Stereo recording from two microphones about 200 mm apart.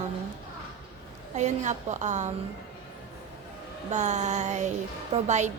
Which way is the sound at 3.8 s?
35° right (ahead or behind).